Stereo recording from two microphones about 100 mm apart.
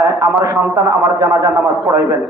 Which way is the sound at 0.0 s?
30° right (ahead or behind).